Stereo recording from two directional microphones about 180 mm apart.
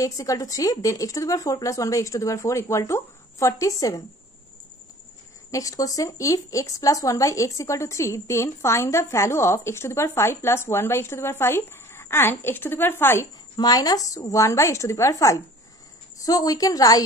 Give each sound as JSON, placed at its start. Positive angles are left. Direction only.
{"t": 0.0, "sound": "speech", "side_deg": 20}
{"t": 5.5, "sound": "speech", "side_deg": 20}